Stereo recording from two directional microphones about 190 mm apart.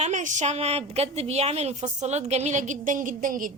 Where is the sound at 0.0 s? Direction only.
40° right (ahead or behind).